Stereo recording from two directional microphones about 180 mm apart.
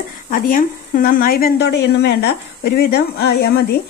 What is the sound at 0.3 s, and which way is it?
A woman's voice, 50° left (ahead or behind).